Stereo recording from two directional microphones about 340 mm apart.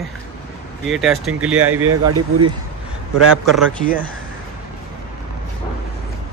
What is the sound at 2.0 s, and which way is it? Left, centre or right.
Speech, right.